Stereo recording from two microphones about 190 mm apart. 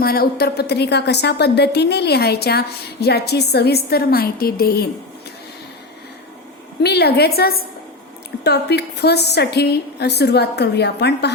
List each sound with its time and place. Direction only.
0.0 s a woman's voice: 55° left (ahead or behind)
6.8 s a woman's voice: 60° left (ahead or behind)